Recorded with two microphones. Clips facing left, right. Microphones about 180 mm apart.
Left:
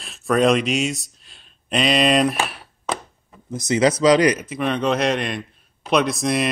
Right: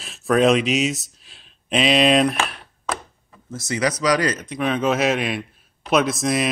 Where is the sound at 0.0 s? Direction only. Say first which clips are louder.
Right 1 dB; centre (ahead or behind).